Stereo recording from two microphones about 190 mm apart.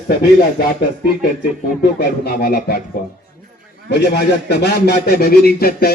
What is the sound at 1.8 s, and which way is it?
Speech, 55° left (ahead or behind).